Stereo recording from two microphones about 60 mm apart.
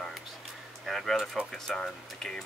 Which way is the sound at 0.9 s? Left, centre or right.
Centre.